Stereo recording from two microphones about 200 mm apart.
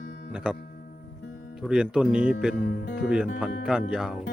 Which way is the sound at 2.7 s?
60° left (ahead or behind).